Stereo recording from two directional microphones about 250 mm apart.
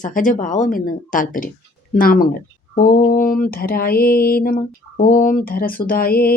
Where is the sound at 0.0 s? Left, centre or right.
Left.